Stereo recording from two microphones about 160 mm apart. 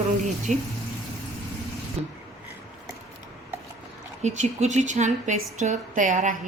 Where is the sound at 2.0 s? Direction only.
40° right (ahead or behind).